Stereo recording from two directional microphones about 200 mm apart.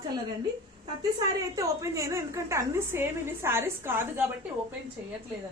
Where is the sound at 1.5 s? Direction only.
15° right (ahead or behind).